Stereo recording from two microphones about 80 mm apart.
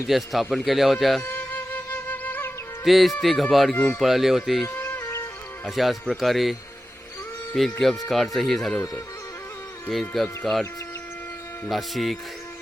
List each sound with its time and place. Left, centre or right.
0.1 s a man's voice: centre
1.2 s music: left
2.8 s a man's voice: centre
3.8 s speech: left
4.0 s a man's voice: centre
4.6 s music: left
5.6 s a man's voice: centre
10.4 s a man's voice: centre
11.7 s a man's voice: centre